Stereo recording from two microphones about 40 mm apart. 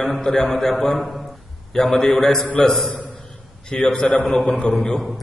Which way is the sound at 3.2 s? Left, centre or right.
Left.